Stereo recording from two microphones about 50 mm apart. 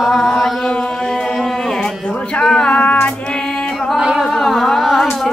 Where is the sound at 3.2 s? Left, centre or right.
Centre.